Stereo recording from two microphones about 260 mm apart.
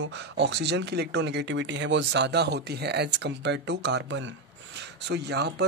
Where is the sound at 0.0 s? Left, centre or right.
Right.